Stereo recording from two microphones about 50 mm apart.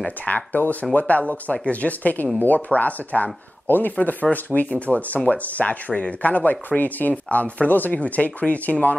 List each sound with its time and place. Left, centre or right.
0.2 s speech: left